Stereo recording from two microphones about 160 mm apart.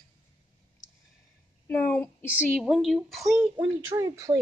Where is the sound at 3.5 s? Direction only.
15° right (ahead or behind).